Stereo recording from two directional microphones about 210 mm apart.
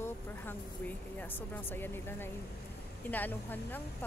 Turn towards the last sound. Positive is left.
turn(degrees=10)  # may be behind; listen again after turning